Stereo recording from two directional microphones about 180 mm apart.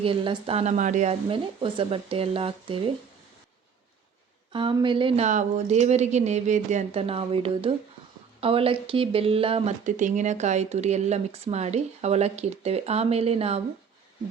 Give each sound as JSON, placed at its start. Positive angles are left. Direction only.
{"t": 0.0, "sound": "speech", "side_deg": -30}
{"t": 1.3, "sound": "speech", "side_deg": -30}
{"t": 4.5, "sound": "speech", "side_deg": -25}
{"t": 9.8, "sound": "speech", "side_deg": -45}